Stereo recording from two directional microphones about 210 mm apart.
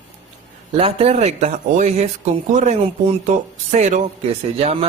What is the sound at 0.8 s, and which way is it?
Speech, 25° right (ahead or behind).